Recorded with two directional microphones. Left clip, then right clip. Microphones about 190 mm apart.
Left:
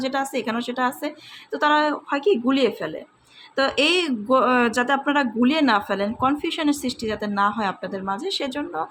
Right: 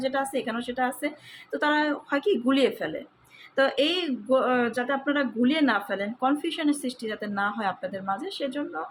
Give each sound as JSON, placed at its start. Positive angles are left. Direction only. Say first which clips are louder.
{"t": 0.0, "sound": "a woman's voice", "louder": "left 3 dB", "side_deg": 20}